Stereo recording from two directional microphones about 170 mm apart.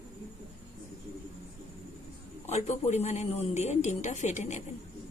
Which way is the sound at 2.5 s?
40° left (ahead or behind).